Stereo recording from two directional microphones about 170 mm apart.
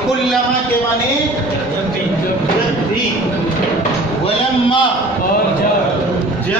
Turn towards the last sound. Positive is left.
turn(degrees=30)  # may be behind; listen again after turning